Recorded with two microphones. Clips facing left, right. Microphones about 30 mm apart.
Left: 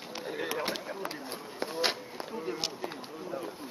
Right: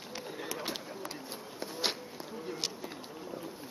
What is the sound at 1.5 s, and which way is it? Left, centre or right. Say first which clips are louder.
Insect: left 4 dB; left.